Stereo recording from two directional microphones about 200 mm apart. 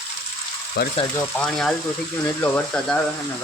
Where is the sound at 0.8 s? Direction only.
55° left (ahead or behind).